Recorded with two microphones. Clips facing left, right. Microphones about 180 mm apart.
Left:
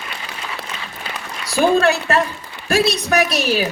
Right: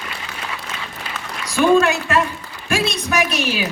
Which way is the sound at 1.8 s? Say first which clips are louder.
Left 1 dB; 35° left (ahead or behind).